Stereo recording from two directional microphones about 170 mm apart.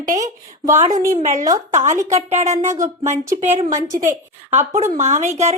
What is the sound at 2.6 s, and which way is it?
Speech, 20° right (ahead or behind).